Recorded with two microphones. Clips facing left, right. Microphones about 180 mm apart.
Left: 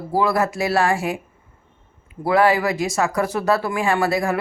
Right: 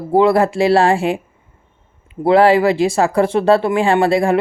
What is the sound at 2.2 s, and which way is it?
Speech, 30° right (ahead or behind).